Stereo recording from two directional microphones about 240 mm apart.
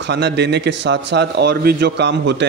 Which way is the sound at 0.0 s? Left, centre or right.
Right.